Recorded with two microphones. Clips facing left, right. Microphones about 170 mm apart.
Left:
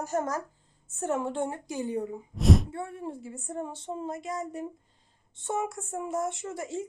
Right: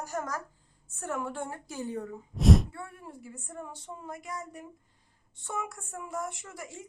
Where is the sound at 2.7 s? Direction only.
25° left (ahead or behind).